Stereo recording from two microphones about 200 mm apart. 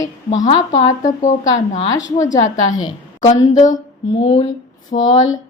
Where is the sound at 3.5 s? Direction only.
40° left (ahead or behind).